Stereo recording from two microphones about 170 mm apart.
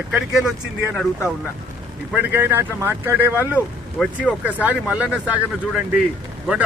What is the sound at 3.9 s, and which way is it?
Speech, 5° left (ahead or behind).